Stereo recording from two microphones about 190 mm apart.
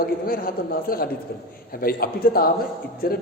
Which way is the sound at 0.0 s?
50° left (ahead or behind).